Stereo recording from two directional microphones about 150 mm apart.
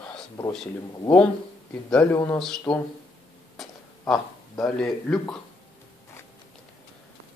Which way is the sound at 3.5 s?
Centre (ahead or behind).